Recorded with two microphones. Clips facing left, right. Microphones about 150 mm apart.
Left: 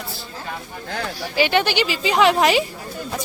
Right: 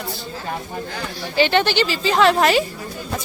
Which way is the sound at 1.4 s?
10° left (ahead or behind).